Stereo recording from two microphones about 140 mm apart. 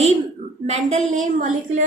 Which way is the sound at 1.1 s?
65° right (ahead or behind).